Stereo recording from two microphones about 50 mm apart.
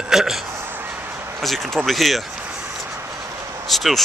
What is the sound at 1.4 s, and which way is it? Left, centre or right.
Speech, centre.